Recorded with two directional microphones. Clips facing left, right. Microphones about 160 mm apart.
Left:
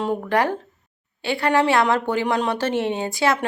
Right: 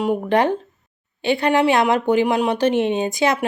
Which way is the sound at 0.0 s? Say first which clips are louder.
Right 3 dB; 20° right (ahead or behind).